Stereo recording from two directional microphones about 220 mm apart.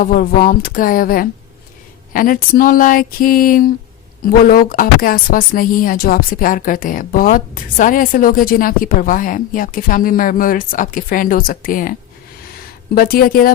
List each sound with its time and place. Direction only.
0.0 s a woman's voice: 40° left (ahead or behind)